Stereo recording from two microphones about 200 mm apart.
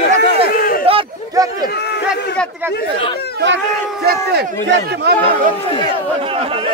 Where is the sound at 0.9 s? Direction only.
25° right (ahead or behind).